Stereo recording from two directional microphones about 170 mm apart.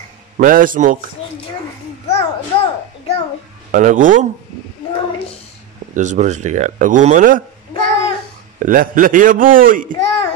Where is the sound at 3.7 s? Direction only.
50° right (ahead or behind).